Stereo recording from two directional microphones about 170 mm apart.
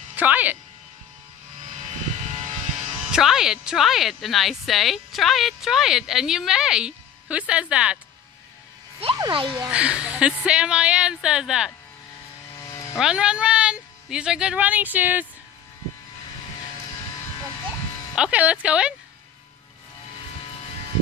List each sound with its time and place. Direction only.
0.1 s speech: 10° right (ahead or behind)
1.9 s vehicle: 40° right (ahead or behind)
3.1 s speech: 5° right (ahead or behind)
9.2 s speech: 30° right (ahead or behind)
9.7 s speech: 5° right (ahead or behind)
12.9 s speech: 5° right (ahead or behind)
18.1 s speech: 5° right (ahead or behind)